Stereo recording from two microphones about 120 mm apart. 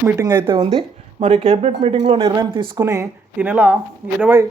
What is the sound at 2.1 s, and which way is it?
Speech, 30° right (ahead or behind).